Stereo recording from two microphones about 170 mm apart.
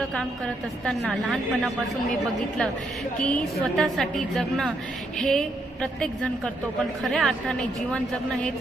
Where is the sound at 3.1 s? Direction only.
5° left (ahead or behind).